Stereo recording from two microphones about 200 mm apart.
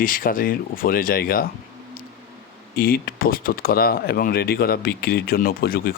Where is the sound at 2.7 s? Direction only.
45° left (ahead or behind).